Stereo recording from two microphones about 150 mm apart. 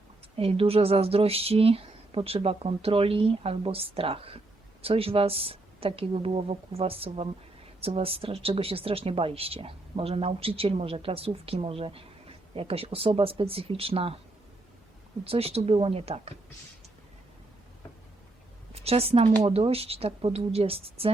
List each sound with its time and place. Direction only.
0.3 s speech: 40° right (ahead or behind)
15.2 s speech: 40° right (ahead or behind)
18.7 s a woman's voice: 40° right (ahead or behind)